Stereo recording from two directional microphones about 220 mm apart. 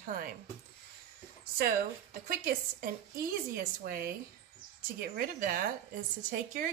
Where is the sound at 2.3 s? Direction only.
40° right (ahead or behind).